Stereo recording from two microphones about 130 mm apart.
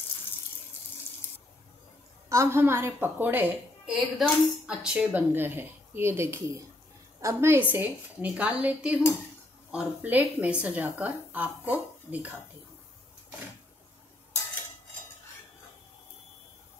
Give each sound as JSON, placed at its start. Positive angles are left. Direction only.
{"t": 2.2, "sound": "a woman's voice", "side_deg": -20}